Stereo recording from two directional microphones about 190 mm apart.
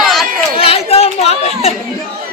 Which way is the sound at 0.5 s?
30° left (ahead or behind).